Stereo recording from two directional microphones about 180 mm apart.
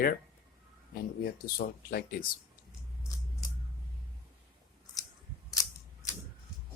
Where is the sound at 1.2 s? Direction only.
55° left (ahead or behind).